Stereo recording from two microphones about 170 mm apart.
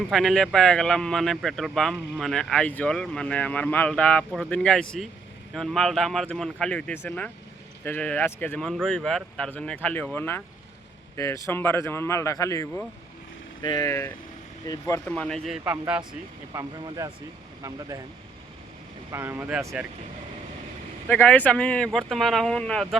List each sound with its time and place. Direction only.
0.1 s speech: centre (ahead or behind); by 15.1 s 15° left (ahead or behind)
15.1 s speech: 5° left (ahead or behind)
16.6 s speech: 20° right (ahead or behind)
19.1 s speech: 15° right (ahead or behind)
21.1 s speech: 10° left (ahead or behind)